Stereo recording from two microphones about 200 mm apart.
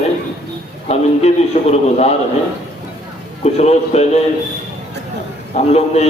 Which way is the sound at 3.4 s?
30° left (ahead or behind).